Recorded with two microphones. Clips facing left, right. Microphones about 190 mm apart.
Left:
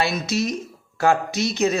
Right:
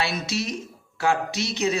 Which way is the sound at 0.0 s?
45° left (ahead or behind).